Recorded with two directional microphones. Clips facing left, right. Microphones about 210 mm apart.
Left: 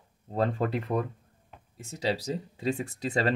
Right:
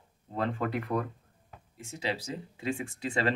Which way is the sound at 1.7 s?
40° left (ahead or behind).